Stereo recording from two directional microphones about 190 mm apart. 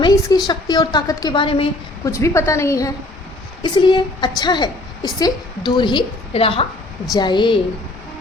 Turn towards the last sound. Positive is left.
turn(degrees=25)  # may be behind; listen again after turning